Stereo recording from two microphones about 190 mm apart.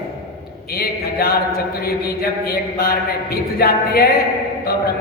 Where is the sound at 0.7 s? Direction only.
55° left (ahead or behind).